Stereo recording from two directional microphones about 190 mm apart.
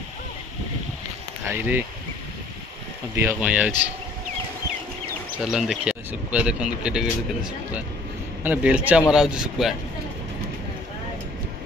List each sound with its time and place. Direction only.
1.5 s speech: 10° right (ahead or behind)
3.2 s speech: 10° right (ahead or behind)
5.4 s speech: 5° right (ahead or behind)
8.5 s speech: 5° right (ahead or behind)